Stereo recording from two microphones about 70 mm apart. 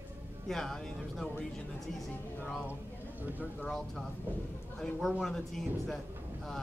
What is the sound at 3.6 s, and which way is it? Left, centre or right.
Speech, centre.